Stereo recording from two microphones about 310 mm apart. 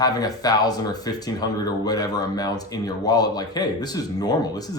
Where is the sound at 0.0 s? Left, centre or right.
Centre.